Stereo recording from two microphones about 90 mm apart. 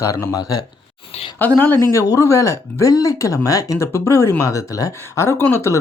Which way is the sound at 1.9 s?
35° left (ahead or behind).